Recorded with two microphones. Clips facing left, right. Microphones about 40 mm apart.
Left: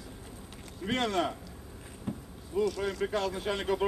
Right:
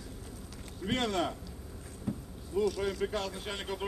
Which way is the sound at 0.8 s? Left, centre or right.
Centre.